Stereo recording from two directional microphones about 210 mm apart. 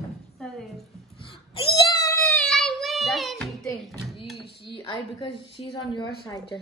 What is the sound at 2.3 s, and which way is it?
Child singing, centre (ahead or behind).